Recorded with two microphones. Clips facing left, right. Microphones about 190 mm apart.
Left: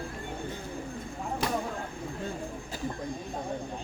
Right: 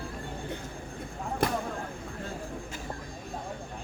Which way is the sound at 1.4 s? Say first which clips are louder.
Right 2 dB; 50° right (ahead or behind).